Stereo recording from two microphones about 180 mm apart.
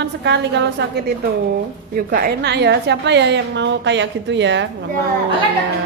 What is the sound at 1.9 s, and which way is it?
A woman's voice, 55° right (ahead or behind).